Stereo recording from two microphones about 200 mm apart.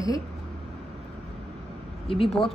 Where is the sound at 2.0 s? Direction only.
25° left (ahead or behind).